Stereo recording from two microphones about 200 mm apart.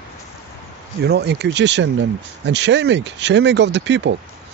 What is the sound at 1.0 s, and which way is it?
Speech, 55° right (ahead or behind).